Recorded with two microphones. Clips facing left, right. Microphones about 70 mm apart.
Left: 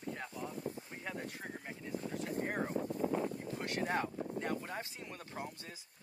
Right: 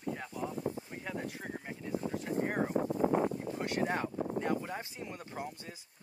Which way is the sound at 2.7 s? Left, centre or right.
Right.